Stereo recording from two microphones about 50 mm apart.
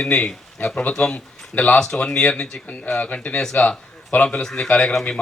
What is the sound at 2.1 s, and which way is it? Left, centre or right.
A man's voice, left.